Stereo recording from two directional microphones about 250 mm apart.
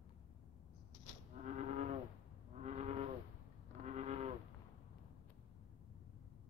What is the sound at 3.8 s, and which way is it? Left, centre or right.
Cattle, right.